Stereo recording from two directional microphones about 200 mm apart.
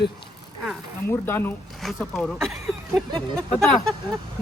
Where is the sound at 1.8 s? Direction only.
Centre (ahead or behind).